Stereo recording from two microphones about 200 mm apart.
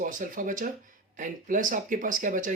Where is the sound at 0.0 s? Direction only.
40° right (ahead or behind).